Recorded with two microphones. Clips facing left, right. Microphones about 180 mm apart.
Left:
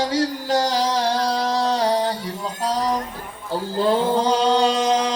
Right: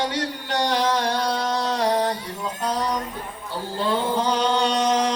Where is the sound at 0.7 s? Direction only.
35° left (ahead or behind).